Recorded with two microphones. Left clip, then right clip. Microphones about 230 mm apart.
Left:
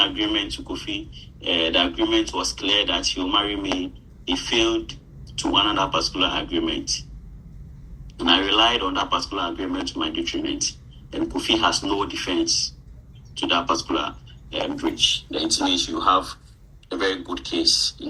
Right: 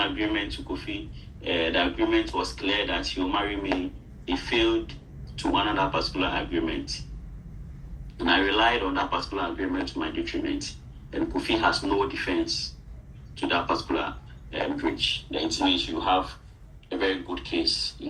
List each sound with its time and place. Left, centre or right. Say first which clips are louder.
0.0 s speech: left 5 dB; left
8.2 s speech: left 4 dB; left